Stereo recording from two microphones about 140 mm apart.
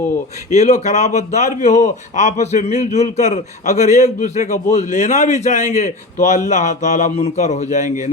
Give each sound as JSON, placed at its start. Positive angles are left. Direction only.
{"t": 0.5, "sound": "a man's voice", "side_deg": 55}